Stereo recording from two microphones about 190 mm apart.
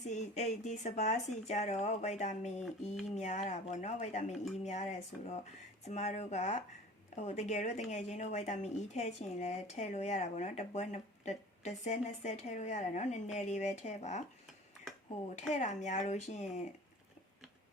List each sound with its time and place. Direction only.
0.0 s speech: 40° left (ahead or behind)
15.4 s speech: 40° left (ahead or behind)